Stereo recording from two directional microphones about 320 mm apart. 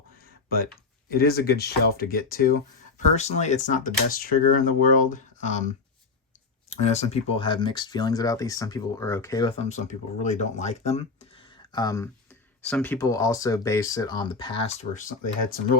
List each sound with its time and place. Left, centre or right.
1.1 s speech: left